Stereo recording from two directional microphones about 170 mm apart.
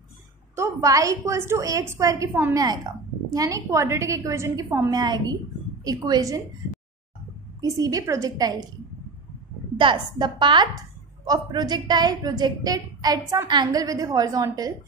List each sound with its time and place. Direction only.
0.6 s a woman's voice: 20° right (ahead or behind)
7.6 s a woman's voice: 20° right (ahead or behind)
9.8 s a woman's voice: 25° right (ahead or behind)